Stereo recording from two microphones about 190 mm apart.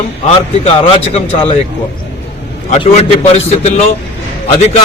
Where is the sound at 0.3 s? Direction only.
30° left (ahead or behind).